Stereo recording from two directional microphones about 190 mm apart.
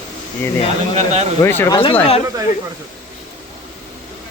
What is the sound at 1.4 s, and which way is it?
Speech, 15° left (ahead or behind).